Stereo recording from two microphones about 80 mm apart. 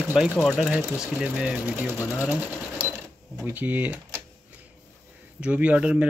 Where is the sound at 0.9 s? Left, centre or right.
Centre.